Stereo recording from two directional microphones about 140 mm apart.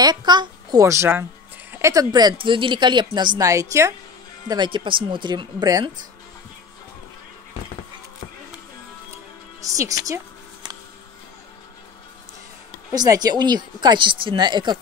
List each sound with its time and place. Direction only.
0.0 s speech: 30° right (ahead or behind)
4.5 s speech: 35° right (ahead or behind)
9.6 s music: 25° right (ahead or behind)
12.9 s speech: 25° right (ahead or behind)